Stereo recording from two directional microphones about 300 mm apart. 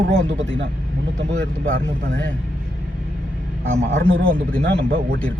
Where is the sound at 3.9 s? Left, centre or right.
Right.